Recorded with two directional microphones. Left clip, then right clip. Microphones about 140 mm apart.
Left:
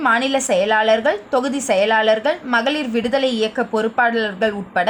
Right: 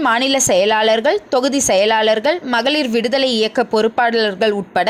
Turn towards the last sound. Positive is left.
turn(degrees=-40)  # may be behind; listen again after turning